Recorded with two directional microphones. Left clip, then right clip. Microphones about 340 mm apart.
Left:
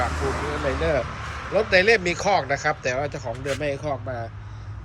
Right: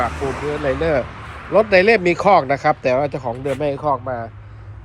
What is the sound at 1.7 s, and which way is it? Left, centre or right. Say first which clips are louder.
Speech: right 3 dB; right.